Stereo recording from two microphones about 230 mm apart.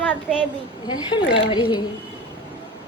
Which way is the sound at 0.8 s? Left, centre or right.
Centre.